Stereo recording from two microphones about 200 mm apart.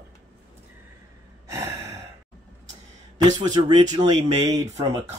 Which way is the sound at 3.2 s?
20° right (ahead or behind).